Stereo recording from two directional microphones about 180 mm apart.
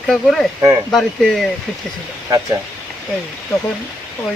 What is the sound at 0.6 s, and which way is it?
Speech, 20° right (ahead or behind).